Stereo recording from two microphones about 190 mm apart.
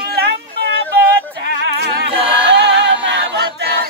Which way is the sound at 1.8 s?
60° right (ahead or behind).